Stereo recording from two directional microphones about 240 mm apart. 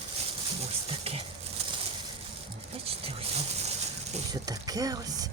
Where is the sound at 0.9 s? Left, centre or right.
Right.